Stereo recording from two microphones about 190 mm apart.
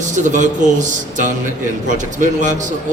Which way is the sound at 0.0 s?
40° right (ahead or behind).